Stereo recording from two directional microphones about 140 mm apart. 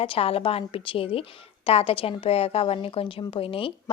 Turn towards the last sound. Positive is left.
turn(degrees=40)  # may be behind; listen again after turning